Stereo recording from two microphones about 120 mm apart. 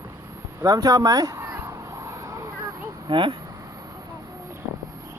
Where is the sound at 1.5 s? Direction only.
25° right (ahead or behind).